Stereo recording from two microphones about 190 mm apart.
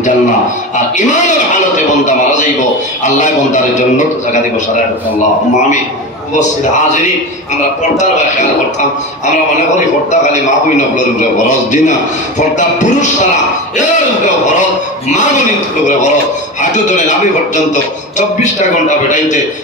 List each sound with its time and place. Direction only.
0.7 s a man's voice: 40° left (ahead or behind)
2.0 s a sound: 40° left (ahead or behind)
3.1 s a man's voice: 40° left (ahead or behind)
11.1 s a man's voice: 40° left (ahead or behind)
15.1 s a man's voice: 40° left (ahead or behind)
16.7 s a man's voice: 40° left (ahead or behind)
19.0 s a man's voice: 40° left (ahead or behind)